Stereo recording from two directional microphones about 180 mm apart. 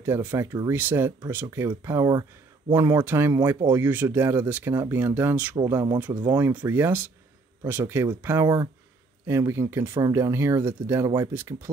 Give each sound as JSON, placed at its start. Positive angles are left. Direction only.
{"t": 0.0, "sound": "speech", "side_deg": -15}